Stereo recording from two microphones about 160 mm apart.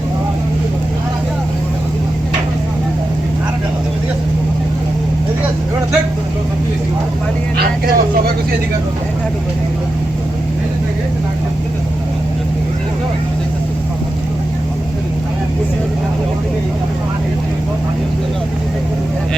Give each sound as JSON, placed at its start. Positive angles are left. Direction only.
{"t": 7.5, "sound": "vehicle", "side_deg": -75}